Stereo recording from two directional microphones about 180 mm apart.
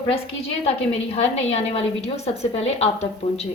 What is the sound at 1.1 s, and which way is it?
A woman's voice, 35° left (ahead or behind).